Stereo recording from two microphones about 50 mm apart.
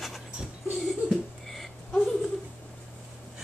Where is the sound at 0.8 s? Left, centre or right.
Centre.